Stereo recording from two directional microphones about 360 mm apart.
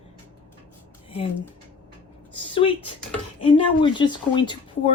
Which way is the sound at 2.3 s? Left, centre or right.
Centre.